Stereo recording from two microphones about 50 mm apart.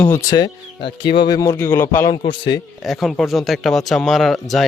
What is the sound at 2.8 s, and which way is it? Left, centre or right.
Speech, centre.